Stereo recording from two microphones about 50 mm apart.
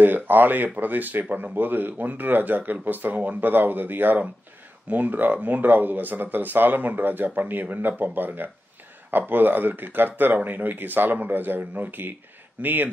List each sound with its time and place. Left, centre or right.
0.0 s speech: right